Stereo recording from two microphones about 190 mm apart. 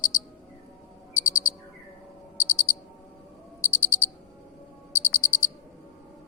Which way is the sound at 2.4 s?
90° left.